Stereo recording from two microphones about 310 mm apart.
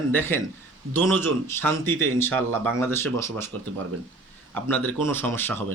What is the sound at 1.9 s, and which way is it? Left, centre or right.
Speech, right.